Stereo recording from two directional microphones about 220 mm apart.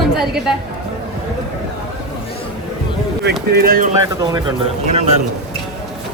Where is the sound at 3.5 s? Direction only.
40° right (ahead or behind).